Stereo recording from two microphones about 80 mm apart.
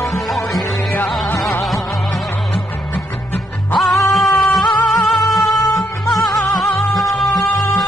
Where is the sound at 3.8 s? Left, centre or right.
Centre.